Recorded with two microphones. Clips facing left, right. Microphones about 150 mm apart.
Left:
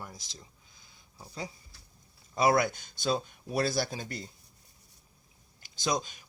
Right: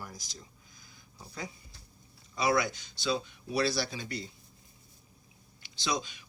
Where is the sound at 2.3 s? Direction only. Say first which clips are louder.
Left 3 dB; 50° left (ahead or behind).